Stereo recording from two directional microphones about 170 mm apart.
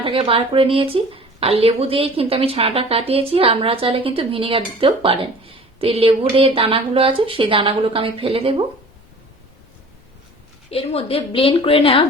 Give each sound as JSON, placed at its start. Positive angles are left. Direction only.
{"t": 0.0, "sound": "a woman's voice", "side_deg": -30}
{"t": 10.7, "sound": "a woman's voice", "side_deg": 35}